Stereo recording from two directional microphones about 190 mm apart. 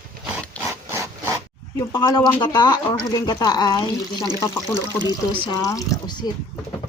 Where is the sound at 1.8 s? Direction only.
20° left (ahead or behind).